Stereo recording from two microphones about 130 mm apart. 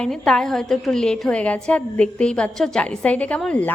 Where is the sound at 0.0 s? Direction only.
5° left (ahead or behind).